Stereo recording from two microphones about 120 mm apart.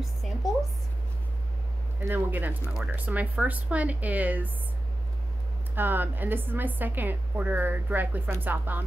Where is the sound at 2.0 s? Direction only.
15° right (ahead or behind).